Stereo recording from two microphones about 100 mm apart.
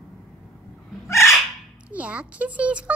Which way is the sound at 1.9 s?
15° right (ahead or behind).